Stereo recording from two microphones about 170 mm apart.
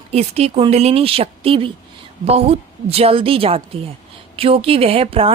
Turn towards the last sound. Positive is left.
turn(degrees=-35)  # may be behind; listen again after turning